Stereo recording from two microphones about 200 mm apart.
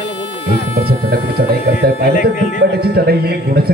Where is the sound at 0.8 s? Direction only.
50° right (ahead or behind).